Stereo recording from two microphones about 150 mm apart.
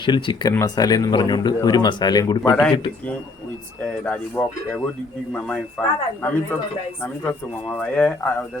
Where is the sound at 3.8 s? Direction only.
10° left (ahead or behind).